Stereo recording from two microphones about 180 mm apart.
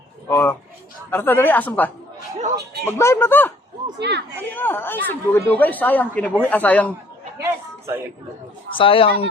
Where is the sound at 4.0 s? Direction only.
70° right (ahead or behind).